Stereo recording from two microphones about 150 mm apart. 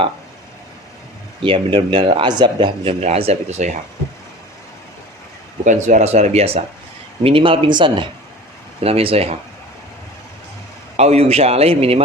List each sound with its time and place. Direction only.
1.4 s speech: 35° right (ahead or behind)
5.6 s a man's voice: 55° right (ahead or behind)
10.9 s a man's voice: 45° right (ahead or behind)